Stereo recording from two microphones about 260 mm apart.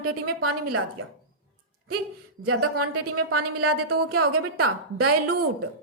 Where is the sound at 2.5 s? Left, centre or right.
Right.